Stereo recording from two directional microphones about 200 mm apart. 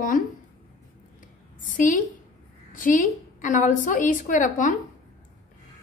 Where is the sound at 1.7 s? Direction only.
40° left (ahead or behind).